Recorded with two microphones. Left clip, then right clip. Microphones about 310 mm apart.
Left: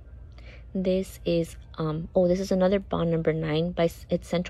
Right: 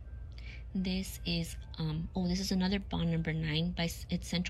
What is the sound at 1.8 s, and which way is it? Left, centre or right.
Speech, centre.